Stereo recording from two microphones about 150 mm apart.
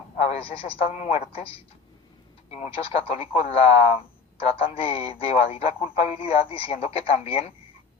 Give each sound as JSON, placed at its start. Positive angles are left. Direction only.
{"t": 0.2, "sound": "speech", "side_deg": 45}
{"t": 0.9, "sound": "a man's voice", "side_deg": 50}
{"t": 1.3, "sound": "speech", "side_deg": 40}